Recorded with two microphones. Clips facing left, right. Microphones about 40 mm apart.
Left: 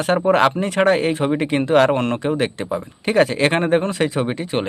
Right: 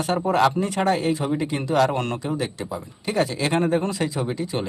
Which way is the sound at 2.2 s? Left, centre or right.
Left.